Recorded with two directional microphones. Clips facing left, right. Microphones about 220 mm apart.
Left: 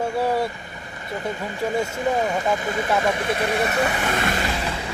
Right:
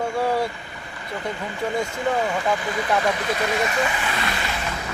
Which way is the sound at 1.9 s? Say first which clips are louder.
Left 1 dB; 20° left (ahead or behind).